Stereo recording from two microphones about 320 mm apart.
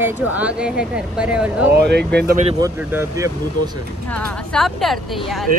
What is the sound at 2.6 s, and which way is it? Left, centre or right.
Speech, centre.